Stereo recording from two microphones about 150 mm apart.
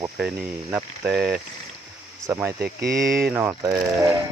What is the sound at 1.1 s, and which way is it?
Speech, 90° right.